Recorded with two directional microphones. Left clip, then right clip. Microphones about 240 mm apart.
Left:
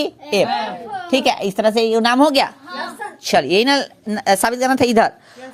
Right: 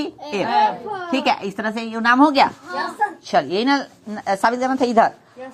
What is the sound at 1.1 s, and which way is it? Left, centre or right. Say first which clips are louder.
Speech: left 4 dB; left.